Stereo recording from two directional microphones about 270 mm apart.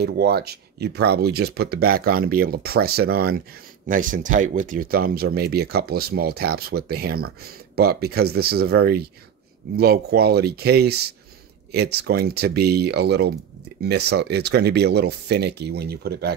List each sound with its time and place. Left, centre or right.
0.0 s speech: right